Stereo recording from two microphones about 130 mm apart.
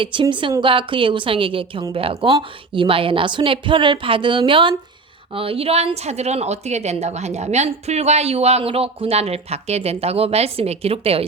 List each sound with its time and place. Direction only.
0.0 s a woman's voice: 40° right (ahead or behind)